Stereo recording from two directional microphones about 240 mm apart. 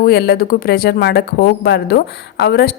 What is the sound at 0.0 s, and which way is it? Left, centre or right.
A woman's voice, left.